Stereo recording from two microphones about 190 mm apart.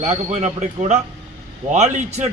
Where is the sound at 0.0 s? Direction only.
35° right (ahead or behind).